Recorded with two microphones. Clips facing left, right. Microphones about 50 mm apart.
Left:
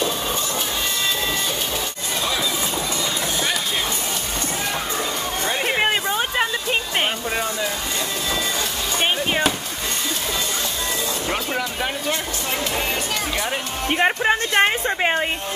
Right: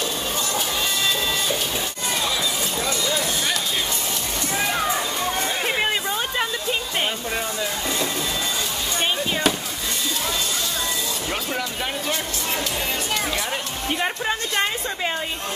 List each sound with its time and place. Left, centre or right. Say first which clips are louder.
5.7 s music: left 5 dB; centre
9.0 s chop: left 3 dB; left
13.8 s speech: left 6 dB; left